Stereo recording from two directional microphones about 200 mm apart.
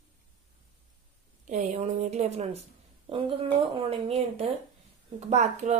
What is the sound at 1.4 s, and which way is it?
Speech, 35° right (ahead or behind).